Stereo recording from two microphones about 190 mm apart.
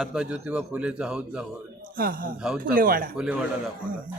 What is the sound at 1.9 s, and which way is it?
A man's voice, 50° right (ahead or behind).